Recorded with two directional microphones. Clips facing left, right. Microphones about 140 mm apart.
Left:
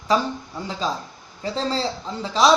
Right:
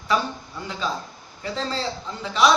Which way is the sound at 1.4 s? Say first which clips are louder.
Left 3 dB; 35° left (ahead or behind).